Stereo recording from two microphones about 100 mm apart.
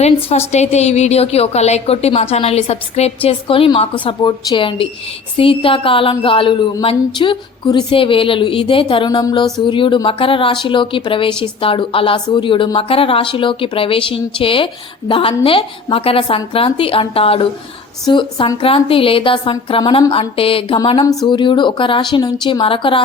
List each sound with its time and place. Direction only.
0.3 s a woman's voice: 90° left
3.2 s speech: 65° left (ahead or behind); by 4.6 s 45° left (ahead or behind)
5.4 s speech: 65° left (ahead or behind)
9.0 s speech: 45° left (ahead or behind); by 17.5 s 70° left (ahead or behind)
18.1 s speech: 55° left (ahead or behind)
21.0 s speech: 35° left (ahead or behind)
21.2 s speech: 50° left (ahead or behind)